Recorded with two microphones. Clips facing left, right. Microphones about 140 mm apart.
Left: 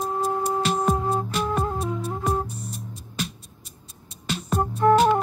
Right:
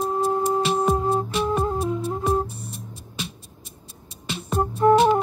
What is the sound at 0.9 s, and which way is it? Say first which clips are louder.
Music: right 3 dB; 25° right (ahead or behind).